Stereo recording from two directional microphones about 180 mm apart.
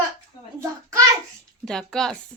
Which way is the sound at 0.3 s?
20° left (ahead or behind).